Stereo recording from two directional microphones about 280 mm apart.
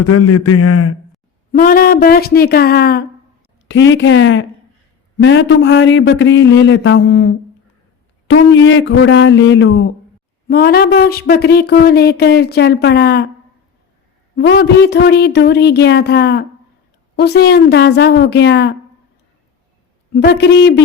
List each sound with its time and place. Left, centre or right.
0.0 s a man's voice: left
1.5 s speech: left
14.3 s speech: left
20.1 s speech: left